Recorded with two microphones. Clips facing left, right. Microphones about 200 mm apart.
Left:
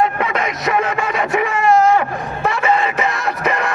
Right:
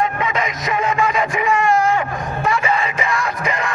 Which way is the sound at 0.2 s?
60° left (ahead or behind).